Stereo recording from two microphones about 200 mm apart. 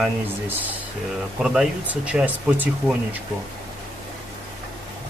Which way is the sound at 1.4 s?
5° right (ahead or behind).